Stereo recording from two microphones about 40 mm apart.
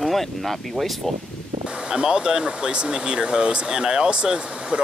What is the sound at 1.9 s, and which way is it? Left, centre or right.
Speech, centre.